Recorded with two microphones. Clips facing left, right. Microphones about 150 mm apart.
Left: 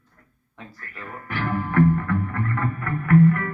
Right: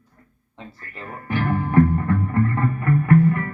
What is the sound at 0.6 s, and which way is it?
Music, 25° right (ahead or behind).